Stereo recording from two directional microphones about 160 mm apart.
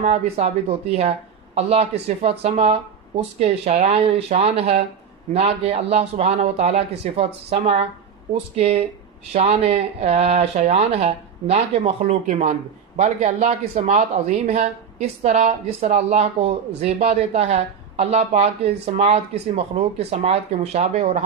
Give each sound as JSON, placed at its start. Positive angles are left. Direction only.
{"t": 0.0, "sound": "speech", "side_deg": -45}